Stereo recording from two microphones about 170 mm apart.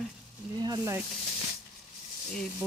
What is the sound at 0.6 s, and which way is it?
Speech, 20° right (ahead or behind).